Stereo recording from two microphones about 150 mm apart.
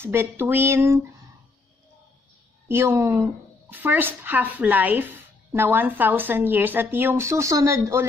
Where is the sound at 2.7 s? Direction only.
15° right (ahead or behind).